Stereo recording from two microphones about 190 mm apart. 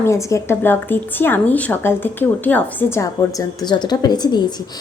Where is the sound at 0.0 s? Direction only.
15° left (ahead or behind).